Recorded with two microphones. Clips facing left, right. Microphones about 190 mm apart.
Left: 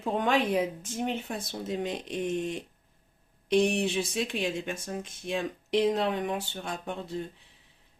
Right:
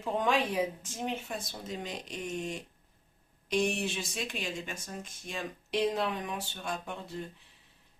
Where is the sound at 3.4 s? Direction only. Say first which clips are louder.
Left 6 dB; 60° left (ahead or behind).